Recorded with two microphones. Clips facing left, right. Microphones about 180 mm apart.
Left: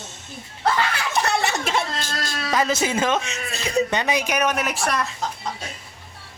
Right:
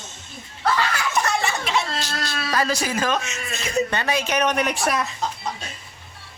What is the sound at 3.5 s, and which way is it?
Speech, 35° left (ahead or behind).